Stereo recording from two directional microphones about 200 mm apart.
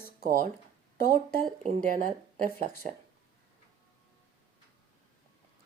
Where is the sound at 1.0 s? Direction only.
50° left (ahead or behind).